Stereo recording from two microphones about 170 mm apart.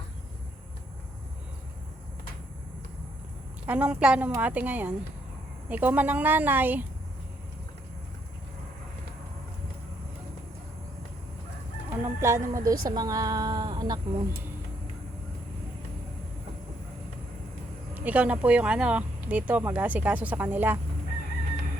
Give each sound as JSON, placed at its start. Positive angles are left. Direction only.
{"t": 3.7, "sound": "speech", "side_deg": -5}
{"t": 11.9, "sound": "a woman's voice", "side_deg": -15}
{"t": 17.9, "sound": "speech", "side_deg": -10}